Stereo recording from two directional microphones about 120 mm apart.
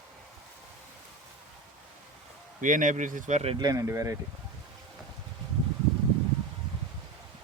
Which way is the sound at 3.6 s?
30° right (ahead or behind).